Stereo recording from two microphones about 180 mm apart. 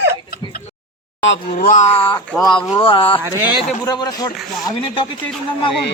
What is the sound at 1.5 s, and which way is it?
Speech, 45° left (ahead or behind).